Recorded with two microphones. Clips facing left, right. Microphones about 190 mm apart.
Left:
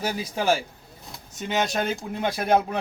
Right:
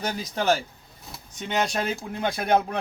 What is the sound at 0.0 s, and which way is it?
Speech, 5° left (ahead or behind).